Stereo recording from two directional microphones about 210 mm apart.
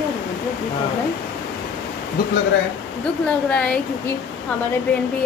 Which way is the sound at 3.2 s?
5° left (ahead or behind).